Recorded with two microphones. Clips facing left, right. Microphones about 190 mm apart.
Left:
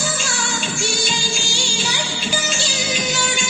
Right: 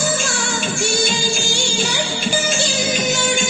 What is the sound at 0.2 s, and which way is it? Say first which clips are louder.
Music: right 3 dB; 50° right (ahead or behind).